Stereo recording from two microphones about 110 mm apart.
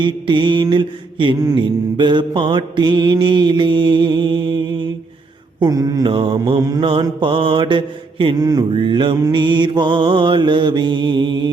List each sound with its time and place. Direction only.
0.0 s mantra: 50° right (ahead or behind)
5.5 s mantra: 35° right (ahead or behind)
6.1 s mantra: 55° right (ahead or behind)
6.6 s mantra: 35° right (ahead or behind)
7.0 s mantra: 50° right (ahead or behind)
8.7 s mantra: 50° right (ahead or behind)